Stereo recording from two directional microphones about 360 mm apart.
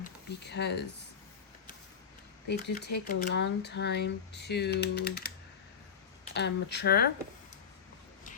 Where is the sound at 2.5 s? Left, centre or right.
Left.